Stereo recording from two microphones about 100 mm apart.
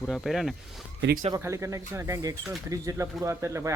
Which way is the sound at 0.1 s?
Centre (ahead or behind).